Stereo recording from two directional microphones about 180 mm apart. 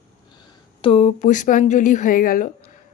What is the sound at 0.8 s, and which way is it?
Speech, 35° left (ahead or behind).